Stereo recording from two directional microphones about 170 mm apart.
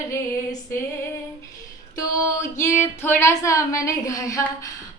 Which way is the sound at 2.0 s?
15° left (ahead or behind).